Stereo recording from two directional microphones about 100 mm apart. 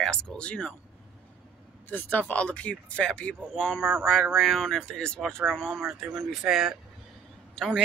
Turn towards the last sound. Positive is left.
turn(degrees=5)  # may be behind; listen again after turning